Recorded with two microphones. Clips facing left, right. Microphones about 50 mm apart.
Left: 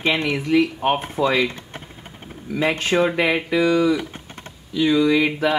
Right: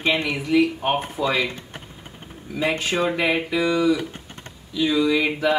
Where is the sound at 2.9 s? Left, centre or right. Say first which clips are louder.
Left 4 dB; centre.